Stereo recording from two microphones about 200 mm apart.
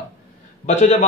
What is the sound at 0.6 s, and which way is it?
Speech, 35° left (ahead or behind).